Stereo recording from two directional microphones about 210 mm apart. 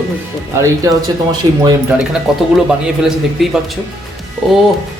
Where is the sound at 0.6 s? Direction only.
15° right (ahead or behind).